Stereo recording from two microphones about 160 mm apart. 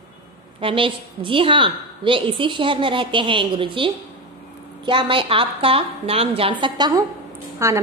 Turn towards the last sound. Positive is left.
turn(degrees=-15)  # may be behind; listen again after turning